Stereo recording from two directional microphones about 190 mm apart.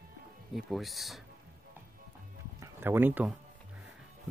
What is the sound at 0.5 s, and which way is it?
Speech, centre (ahead or behind).